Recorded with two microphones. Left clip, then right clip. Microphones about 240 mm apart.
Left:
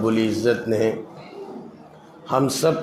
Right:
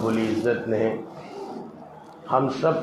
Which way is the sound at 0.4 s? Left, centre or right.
Left.